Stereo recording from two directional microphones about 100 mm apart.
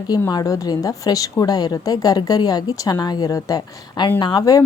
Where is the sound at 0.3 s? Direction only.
40° left (ahead or behind).